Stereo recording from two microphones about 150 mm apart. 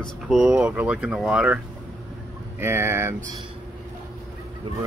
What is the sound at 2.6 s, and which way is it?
Speech, 15° right (ahead or behind).